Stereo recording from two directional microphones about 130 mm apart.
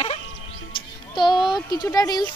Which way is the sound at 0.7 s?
35° left (ahead or behind).